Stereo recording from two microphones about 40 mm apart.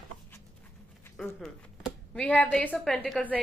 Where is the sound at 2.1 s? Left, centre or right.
Left.